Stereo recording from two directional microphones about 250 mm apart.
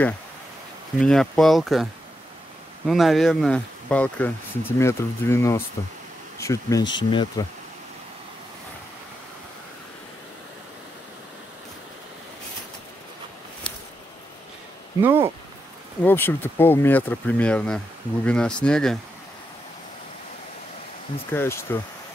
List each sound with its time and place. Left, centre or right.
1.0 s speech: centre
2.9 s speech: centre
15.0 s speech: centre
16.0 s speech: centre
21.3 s speech: centre